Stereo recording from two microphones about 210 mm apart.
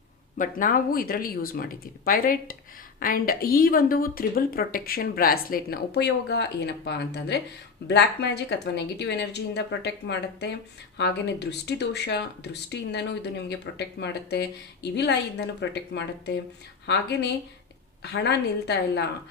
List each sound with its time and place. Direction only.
0.3 s speech: 40° left (ahead or behind)